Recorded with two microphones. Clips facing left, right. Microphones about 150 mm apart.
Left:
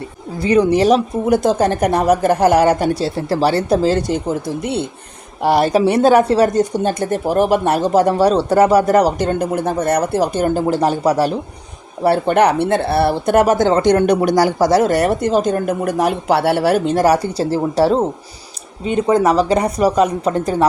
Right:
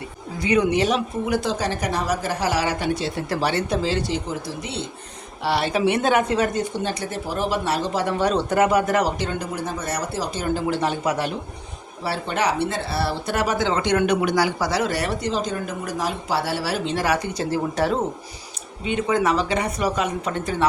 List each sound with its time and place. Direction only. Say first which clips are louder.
0.3 s a woman's voice: left 6 dB; 35° left (ahead or behind); by 4.9 s 55° left (ahead or behind)
5.4 s a woman's voice: left 8 dB; 45° left (ahead or behind)
12.0 s a woman's voice: left 10 dB; 55° left (ahead or behind)
17.3 s speech: left 7 dB; 30° left (ahead or behind)